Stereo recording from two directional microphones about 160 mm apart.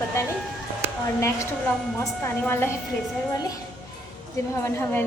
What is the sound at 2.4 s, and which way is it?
Speech, 15° left (ahead or behind).